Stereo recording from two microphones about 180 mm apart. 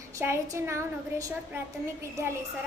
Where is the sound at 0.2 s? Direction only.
15° right (ahead or behind).